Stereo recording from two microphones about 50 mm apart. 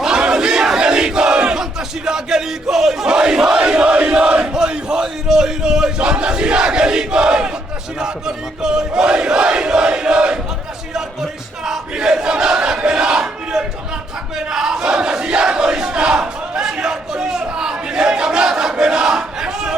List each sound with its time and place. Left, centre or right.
0.0 s battle cry: centre
8.6 s a sound: centre
10.9 s battle cry: centre